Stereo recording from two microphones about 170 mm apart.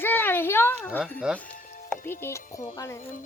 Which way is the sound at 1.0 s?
5° right (ahead or behind).